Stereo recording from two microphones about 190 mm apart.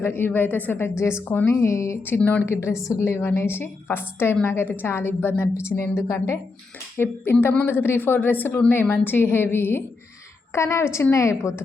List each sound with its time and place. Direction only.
0.0 s a woman's voice: 10° left (ahead or behind)